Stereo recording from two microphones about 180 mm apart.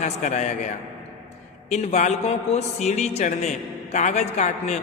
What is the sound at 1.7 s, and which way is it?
A man's voice, 40° left (ahead or behind).